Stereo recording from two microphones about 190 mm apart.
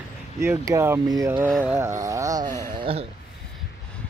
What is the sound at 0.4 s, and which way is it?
Speech, 15° right (ahead or behind).